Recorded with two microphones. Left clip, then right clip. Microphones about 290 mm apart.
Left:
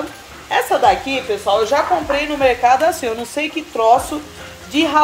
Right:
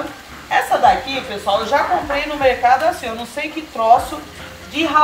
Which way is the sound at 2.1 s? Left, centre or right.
Left.